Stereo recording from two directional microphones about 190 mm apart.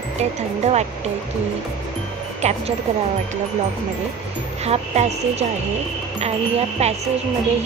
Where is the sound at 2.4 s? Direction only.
35° right (ahead or behind).